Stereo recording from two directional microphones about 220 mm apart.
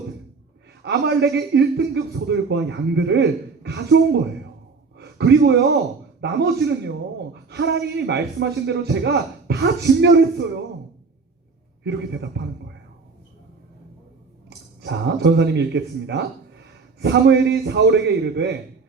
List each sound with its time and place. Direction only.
0.8 s a man's voice: 50° right (ahead or behind)
11.8 s a man's voice: 50° right (ahead or behind)
14.8 s a man's voice: 50° right (ahead or behind)